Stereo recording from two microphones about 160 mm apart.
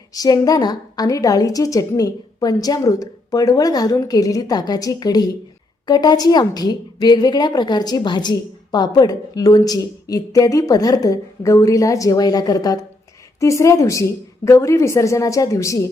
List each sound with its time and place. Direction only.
0.1 s a woman's voice: 25° left (ahead or behind)